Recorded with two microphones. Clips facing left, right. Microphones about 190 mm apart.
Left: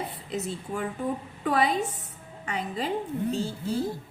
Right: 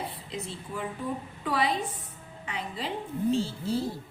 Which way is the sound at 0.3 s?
45° left (ahead or behind).